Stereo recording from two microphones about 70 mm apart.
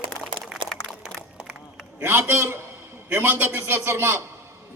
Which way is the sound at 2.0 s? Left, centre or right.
Right.